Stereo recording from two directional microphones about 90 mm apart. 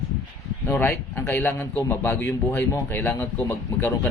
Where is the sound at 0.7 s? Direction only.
20° left (ahead or behind).